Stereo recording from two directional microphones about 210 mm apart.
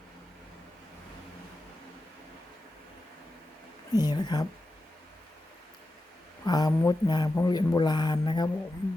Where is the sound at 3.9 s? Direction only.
20° left (ahead or behind).